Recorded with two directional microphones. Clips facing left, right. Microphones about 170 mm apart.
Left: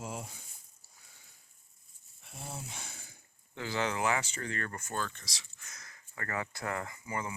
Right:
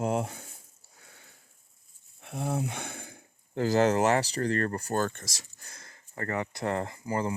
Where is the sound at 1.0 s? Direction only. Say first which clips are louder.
Right 11 dB; 65° right (ahead or behind).